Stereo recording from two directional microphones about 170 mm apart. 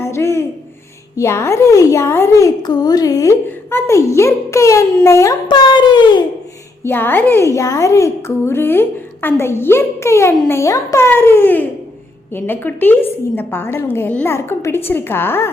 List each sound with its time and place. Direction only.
0.0 s a sound: 15° left (ahead or behind)
1.1 s a woman's voice: 15° left (ahead or behind)
6.8 s a woman's voice: 10° left (ahead or behind)